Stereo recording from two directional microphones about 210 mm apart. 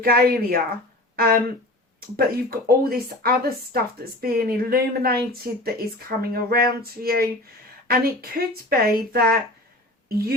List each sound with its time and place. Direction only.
0.0 s speech: 45° right (ahead or behind)